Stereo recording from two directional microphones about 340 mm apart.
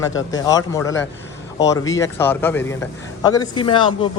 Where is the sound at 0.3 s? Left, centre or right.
Centre.